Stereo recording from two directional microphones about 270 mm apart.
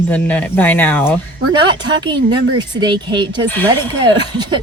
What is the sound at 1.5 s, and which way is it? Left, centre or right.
Speech, centre.